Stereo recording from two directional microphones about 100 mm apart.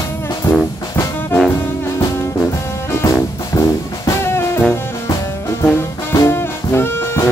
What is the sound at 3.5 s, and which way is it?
Music, 30° left (ahead or behind).